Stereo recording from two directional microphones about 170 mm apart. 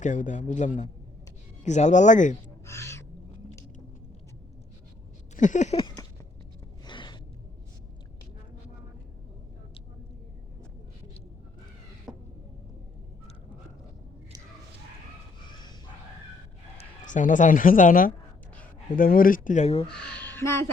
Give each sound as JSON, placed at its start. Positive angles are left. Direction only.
{"t": 0.0, "sound": "speech", "side_deg": 45}
{"t": 2.6, "sound": "owl", "side_deg": 15}
{"t": 5.4, "sound": "speech", "side_deg": 45}
{"t": 5.7, "sound": "a sound", "side_deg": 25}
{"t": 15.4, "sound": "bow-wow", "side_deg": 25}
{"t": 16.7, "sound": "speech", "side_deg": 50}
{"t": 20.2, "sound": "a sound", "side_deg": 15}